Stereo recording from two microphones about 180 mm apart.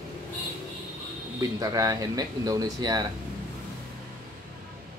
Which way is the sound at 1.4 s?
20° right (ahead or behind).